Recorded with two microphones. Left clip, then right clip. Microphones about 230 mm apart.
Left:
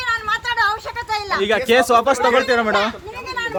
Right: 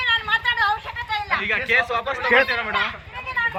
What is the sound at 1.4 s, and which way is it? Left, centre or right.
Speech, left.